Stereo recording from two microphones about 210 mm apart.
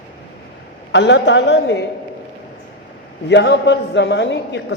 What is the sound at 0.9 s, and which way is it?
Speech, 55° left (ahead or behind).